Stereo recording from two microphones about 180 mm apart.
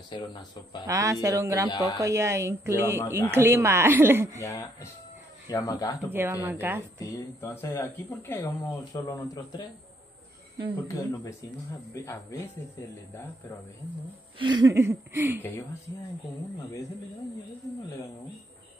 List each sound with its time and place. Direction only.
0.1 s speech: 25° left (ahead or behind)
0.8 s speech: 15° right (ahead or behind)
1.7 s speech: 20° left (ahead or behind)
2.0 s speech: 15° right (ahead or behind)
4.4 s speech: 15° left (ahead or behind)
6.1 s speech: 15° right (ahead or behind)
7.2 s speech: 15° left (ahead or behind)
10.8 s speech: 15° left (ahead or behind)
14.4 s speech: 25° right (ahead or behind)